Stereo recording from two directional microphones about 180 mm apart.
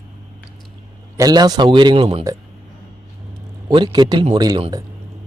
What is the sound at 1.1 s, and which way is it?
A man's voice, 20° right (ahead or behind).